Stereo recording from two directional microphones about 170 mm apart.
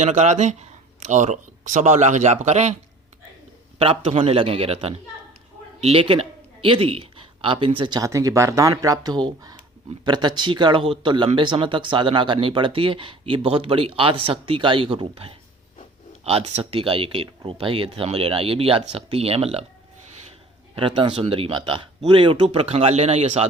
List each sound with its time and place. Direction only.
0.0 s speech: 45° right (ahead or behind)
3.8 s a man's voice: 35° right (ahead or behind)
20.7 s speech: 30° right (ahead or behind)